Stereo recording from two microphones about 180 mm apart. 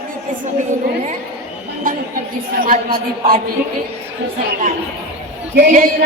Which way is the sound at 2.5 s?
55° right (ahead or behind).